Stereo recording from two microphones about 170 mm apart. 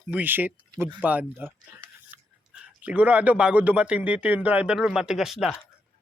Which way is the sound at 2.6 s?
10° right (ahead or behind).